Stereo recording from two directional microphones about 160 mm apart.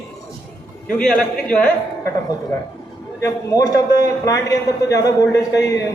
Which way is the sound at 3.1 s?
20° left (ahead or behind).